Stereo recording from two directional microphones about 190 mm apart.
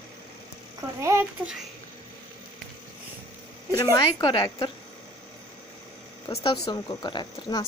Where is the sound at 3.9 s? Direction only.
20° left (ahead or behind).